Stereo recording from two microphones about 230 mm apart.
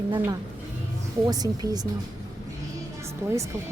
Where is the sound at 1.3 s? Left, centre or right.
Centre.